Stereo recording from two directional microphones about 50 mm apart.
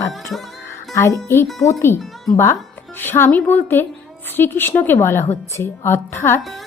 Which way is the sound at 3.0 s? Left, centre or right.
Left.